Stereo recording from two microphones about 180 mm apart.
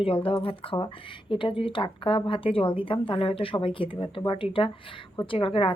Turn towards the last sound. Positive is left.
turn(degrees=30)  # may be behind; listen again after turning